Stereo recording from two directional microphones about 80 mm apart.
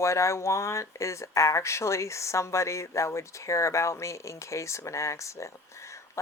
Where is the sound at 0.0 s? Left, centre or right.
Left.